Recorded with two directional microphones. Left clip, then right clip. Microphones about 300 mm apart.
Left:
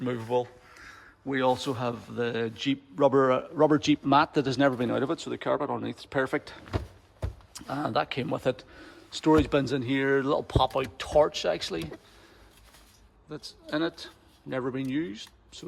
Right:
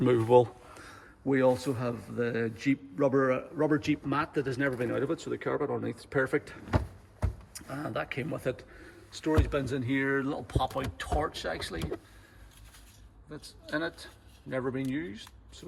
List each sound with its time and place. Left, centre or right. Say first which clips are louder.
0.0 s speech: right 7 dB; right
0.7 s speech: left 1 dB; centre
13.3 s speech: left 3 dB; centre